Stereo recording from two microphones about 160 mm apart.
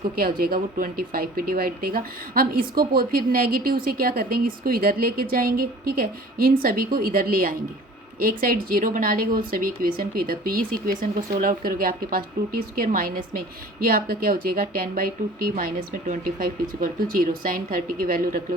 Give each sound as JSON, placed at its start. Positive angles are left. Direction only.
{"t": 0.2, "sound": "speech", "side_deg": -65}